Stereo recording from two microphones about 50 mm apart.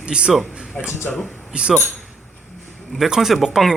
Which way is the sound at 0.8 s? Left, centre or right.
Centre.